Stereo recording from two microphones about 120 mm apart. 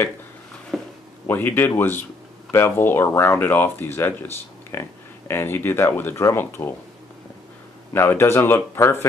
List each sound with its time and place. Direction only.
0.7 s a sound: centre (ahead or behind)
1.2 s speech: 15° left (ahead or behind)
7.9 s speech: 20° left (ahead or behind)